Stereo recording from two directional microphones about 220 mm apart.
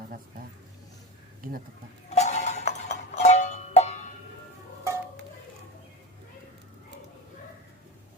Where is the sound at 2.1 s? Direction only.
30° left (ahead or behind).